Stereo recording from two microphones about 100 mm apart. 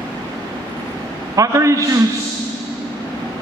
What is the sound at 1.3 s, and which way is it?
Speech, 35° right (ahead or behind).